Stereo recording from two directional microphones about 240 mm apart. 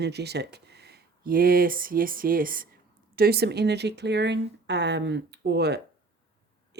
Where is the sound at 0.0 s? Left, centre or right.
Right.